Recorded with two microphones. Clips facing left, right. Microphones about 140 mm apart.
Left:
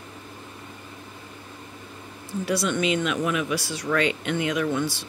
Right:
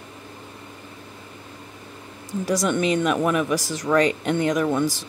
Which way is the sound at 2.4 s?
45° right (ahead or behind).